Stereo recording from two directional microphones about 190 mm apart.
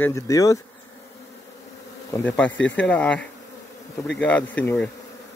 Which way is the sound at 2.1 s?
10° left (ahead or behind).